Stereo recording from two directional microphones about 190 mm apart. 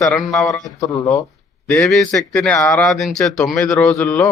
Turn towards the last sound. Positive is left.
turn(degrees=10)  # may be behind; listen again after turning